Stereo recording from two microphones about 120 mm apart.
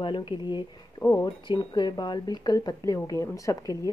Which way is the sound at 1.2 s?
45° left (ahead or behind).